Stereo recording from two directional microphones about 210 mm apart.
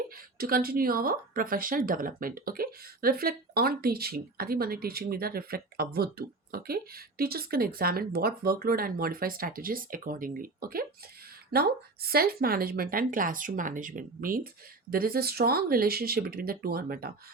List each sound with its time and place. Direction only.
0.3 s speech: 45° right (ahead or behind)